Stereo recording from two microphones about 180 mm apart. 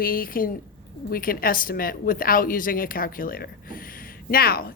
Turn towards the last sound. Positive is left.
turn(degrees=55)  # may be behind; listen again after turning